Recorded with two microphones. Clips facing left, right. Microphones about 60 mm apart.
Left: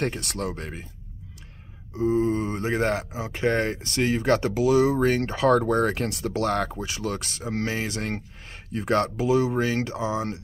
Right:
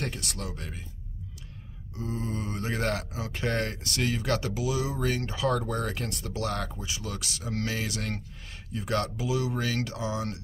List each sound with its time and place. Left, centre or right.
0.0 s speech: left
2.0 s speech: left